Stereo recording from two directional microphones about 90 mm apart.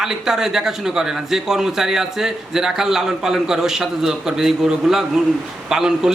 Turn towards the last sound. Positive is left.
turn(degrees=-5)  # may be behind; listen again after turning